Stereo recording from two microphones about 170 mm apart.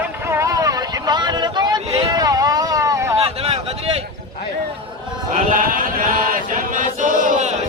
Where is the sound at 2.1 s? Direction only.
20° right (ahead or behind).